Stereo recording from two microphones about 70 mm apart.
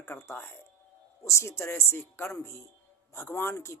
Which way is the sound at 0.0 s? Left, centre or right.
Left.